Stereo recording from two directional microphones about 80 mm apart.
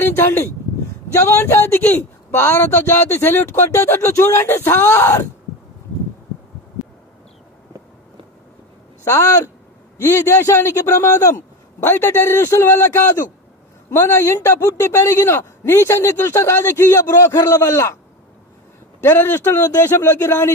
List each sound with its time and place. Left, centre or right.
0.0 s a man's voice: left
9.0 s a man's voice: left
11.8 s a man's voice: left
18.9 s speech: left